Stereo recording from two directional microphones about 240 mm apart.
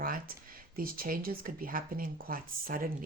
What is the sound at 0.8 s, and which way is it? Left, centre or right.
Speech, right.